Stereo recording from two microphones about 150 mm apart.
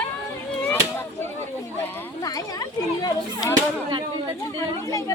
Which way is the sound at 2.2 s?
25° left (ahead or behind).